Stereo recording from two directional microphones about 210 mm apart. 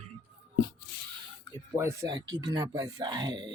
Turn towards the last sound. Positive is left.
turn(degrees=-20)  # may be behind; listen again after turning